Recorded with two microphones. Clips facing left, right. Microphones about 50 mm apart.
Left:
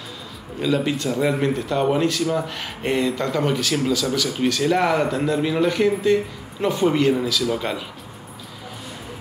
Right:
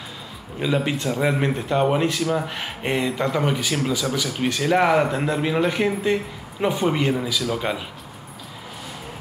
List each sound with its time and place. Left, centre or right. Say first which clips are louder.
0.6 s a man's voice: left 1 dB; centre